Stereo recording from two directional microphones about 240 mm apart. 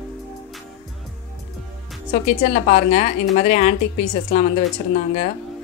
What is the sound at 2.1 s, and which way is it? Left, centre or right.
A woman's voice, left.